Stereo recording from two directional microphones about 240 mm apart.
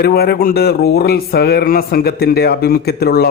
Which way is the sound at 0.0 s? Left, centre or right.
Left.